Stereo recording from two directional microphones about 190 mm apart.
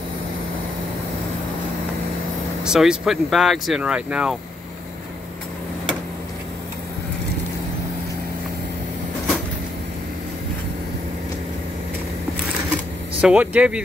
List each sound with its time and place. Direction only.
2.6 s speech: 5° right (ahead or behind)
13.2 s speech: 5° right (ahead or behind)